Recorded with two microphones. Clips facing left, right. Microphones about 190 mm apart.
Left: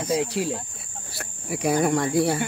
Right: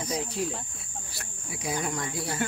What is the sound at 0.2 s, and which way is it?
Speech, 75° left (ahead or behind).